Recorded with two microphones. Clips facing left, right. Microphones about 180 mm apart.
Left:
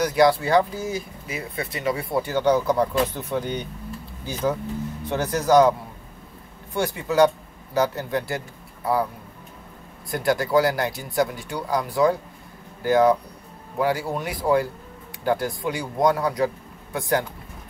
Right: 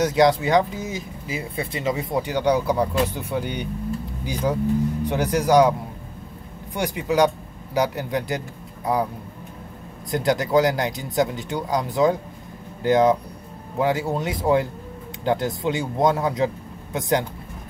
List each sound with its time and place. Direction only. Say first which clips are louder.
0.0 s speech: right 1 dB; 20° right (ahead or behind)
10.1 s speech: right 1 dB; 20° right (ahead or behind)